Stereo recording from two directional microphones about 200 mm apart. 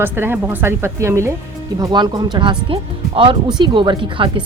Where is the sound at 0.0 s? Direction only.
10° right (ahead or behind).